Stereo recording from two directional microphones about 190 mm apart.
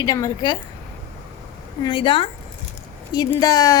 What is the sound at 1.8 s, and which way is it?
Speech, 25° left (ahead or behind).